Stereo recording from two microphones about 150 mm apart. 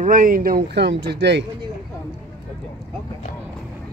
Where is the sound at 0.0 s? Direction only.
60° right (ahead or behind); by 1.1 s 80° right.